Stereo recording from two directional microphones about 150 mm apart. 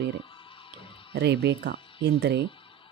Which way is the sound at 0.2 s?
35° left (ahead or behind).